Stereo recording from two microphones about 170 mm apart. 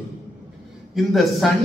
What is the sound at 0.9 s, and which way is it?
Speech, centre (ahead or behind).